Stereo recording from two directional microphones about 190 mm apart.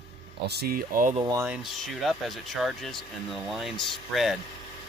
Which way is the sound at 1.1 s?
20° right (ahead or behind).